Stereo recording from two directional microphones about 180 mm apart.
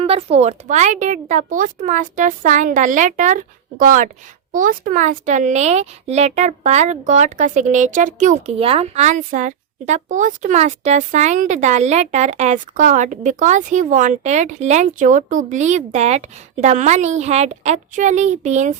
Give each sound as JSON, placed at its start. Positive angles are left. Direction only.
{"t": 0.0, "sound": "a woman's voice", "side_deg": -35}